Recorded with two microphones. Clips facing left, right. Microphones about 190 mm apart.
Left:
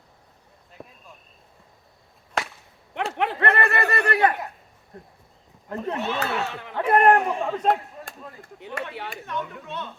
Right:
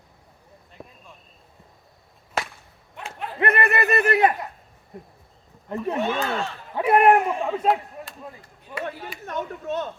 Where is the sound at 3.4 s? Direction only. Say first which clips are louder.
Right 3 dB; 20° right (ahead or behind).